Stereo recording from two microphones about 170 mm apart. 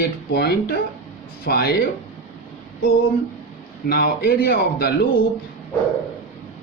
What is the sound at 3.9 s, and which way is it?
A man's voice, 65° left (ahead or behind).